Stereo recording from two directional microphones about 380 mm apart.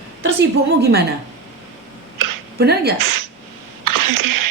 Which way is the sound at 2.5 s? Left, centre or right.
Right.